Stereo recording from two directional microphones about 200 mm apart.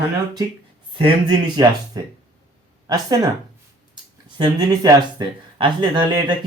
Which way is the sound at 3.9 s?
20° right (ahead or behind).